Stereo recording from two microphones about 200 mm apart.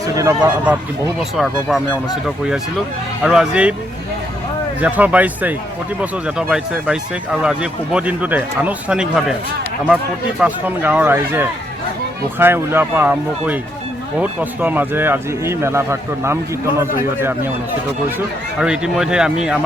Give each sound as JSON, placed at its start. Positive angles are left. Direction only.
{"t": 0.1, "sound": "a man's voice", "side_deg": -15}
{"t": 4.8, "sound": "a man's voice", "side_deg": -10}
{"t": 10.4, "sound": "a man's voice", "side_deg": -10}
{"t": 18.6, "sound": "speech", "side_deg": -5}